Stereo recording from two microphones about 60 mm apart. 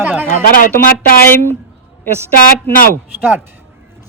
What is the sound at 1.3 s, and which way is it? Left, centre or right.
Speech, left.